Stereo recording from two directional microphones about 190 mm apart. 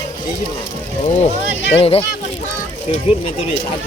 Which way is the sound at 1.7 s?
30° left (ahead or behind).